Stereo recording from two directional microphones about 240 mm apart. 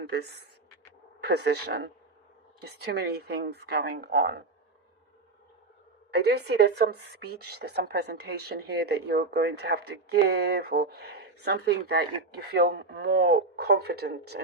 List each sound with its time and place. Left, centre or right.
0.1 s speech: right
6.1 s speech: right